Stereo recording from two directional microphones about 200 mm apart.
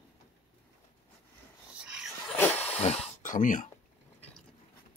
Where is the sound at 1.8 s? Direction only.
5° right (ahead or behind).